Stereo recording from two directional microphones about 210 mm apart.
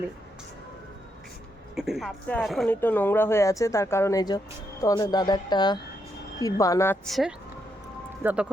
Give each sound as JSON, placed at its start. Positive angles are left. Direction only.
{"t": 1.7, "sound": "speech", "side_deg": 0}